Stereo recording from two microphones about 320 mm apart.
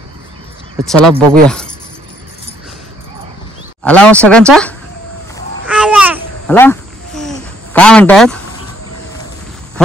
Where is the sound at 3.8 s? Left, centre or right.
Centre.